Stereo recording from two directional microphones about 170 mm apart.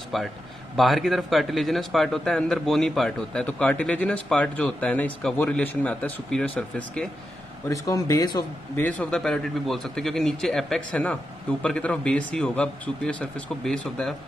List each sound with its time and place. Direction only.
0.1 s a man's voice: centre (ahead or behind)
7.6 s a man's voice: 20° left (ahead or behind)
8.7 s a man's voice: 10° left (ahead or behind)